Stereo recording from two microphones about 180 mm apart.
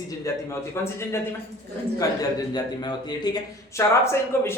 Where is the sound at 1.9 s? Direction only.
20° left (ahead or behind).